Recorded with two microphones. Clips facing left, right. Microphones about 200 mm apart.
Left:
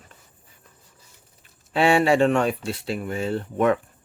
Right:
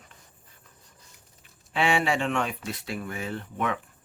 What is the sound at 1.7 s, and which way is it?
Speech, 40° left (ahead or behind).